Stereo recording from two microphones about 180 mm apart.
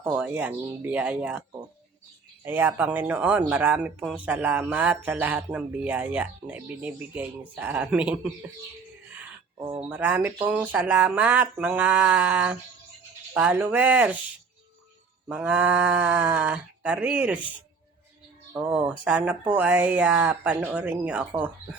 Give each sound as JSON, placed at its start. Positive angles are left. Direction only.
{"t": 0.0, "sound": "speech", "side_deg": -10}
{"t": 9.9, "sound": "speech", "side_deg": -10}
{"t": 15.3, "sound": "speech", "side_deg": -10}
{"t": 18.5, "sound": "speech", "side_deg": -5}